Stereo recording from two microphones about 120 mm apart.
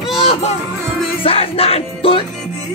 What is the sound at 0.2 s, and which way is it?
Music, 60° left (ahead or behind).